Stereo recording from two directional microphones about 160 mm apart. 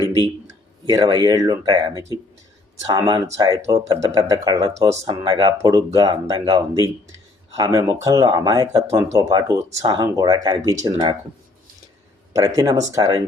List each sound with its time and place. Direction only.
0.9 s speech: 25° right (ahead or behind)
12.5 s speech: 20° right (ahead or behind)